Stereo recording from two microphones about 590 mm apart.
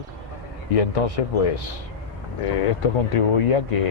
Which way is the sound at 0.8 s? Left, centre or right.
Left.